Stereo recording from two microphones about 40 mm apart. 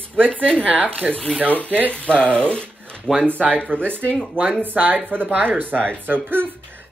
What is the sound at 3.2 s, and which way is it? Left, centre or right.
Speech, right.